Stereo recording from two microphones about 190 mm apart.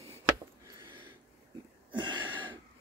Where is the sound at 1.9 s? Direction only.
25° right (ahead or behind).